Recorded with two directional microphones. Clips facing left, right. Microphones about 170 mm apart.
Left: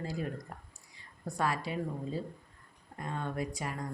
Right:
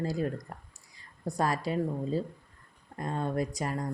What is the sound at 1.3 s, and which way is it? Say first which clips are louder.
Speech: right 4 dB; 40° right (ahead or behind).